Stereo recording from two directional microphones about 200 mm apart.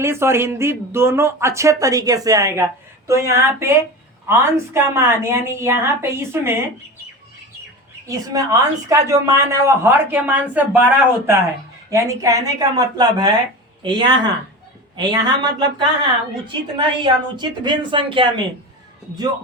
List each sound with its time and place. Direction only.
0.0 s speech: 10° right (ahead or behind)
8.0 s a woman's voice: 15° right (ahead or behind)